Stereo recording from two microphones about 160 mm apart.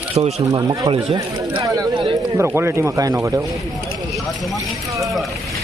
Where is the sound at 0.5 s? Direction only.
25° right (ahead or behind).